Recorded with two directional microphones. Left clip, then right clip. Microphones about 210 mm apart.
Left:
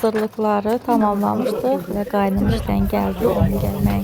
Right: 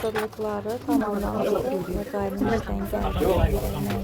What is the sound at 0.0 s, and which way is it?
A woman's voice, 40° left (ahead or behind).